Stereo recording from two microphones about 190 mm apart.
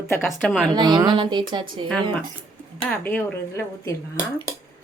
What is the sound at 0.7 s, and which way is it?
Speech, 20° right (ahead or behind).